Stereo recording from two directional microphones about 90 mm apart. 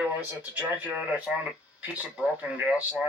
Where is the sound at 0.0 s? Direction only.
20° right (ahead or behind).